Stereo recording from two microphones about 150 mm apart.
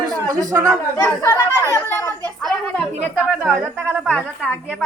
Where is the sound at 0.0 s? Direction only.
25° right (ahead or behind).